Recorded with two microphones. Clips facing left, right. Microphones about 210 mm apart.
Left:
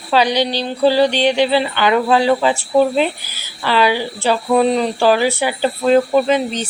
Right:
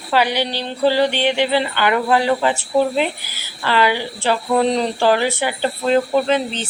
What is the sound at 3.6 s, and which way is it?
Speech, 15° left (ahead or behind).